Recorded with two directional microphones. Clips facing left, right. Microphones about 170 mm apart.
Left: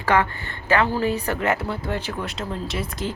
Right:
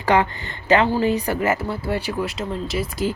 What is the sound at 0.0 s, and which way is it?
A woman's voice, 20° right (ahead or behind).